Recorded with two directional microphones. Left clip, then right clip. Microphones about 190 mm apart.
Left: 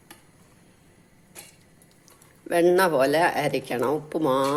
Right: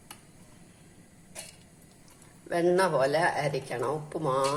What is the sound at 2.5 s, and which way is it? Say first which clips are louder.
Speech: left 5 dB; 45° left (ahead or behind).